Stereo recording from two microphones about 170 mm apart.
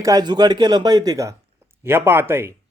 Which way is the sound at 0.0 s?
25° right (ahead or behind).